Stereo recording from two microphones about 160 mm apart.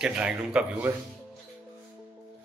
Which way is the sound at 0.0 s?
5° right (ahead or behind).